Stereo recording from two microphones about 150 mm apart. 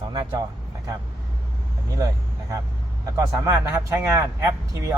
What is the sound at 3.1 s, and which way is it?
Speech, 20° right (ahead or behind).